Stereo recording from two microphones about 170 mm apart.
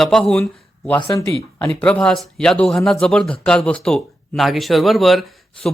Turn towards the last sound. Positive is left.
turn(degrees=0)  # may be behind; listen again after turning